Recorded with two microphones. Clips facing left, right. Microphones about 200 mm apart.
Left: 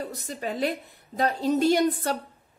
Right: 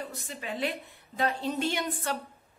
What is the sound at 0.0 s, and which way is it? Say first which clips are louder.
A woman's voice: left 6 dB; 40° left (ahead or behind).